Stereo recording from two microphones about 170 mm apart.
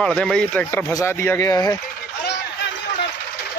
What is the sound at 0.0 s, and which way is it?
Speech, 5° left (ahead or behind).